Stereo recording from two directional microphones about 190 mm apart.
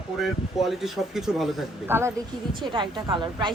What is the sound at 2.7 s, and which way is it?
Speech, 25° right (ahead or behind).